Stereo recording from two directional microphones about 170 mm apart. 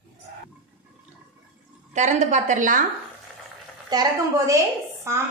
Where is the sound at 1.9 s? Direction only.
45° right (ahead or behind).